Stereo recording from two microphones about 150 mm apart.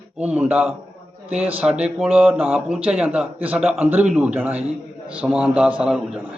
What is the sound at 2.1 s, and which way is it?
A man's voice, 10° right (ahead or behind).